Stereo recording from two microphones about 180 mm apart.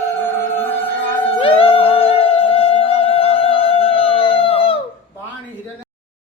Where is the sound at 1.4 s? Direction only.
30° left (ahead or behind).